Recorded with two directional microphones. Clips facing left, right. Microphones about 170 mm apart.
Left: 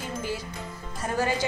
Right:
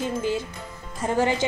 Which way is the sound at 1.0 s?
25° right (ahead or behind).